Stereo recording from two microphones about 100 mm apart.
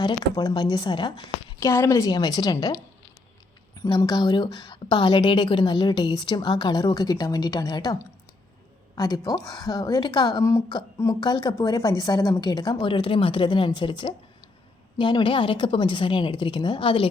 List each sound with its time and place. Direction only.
0.0 s a woman's voice: 45° left (ahead or behind)
1.5 s a woman's voice: 30° left (ahead or behind)
2.0 s a woman's voice: 45° left (ahead or behind)
3.8 s a woman's voice: 45° left (ahead or behind)
9.0 s a woman's voice: 40° left (ahead or behind); by 17.1 s 60° left (ahead or behind)